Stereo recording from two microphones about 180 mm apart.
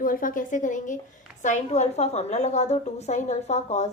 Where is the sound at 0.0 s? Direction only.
50° left (ahead or behind).